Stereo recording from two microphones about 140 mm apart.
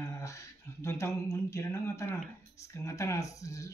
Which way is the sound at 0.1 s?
20° left (ahead or behind).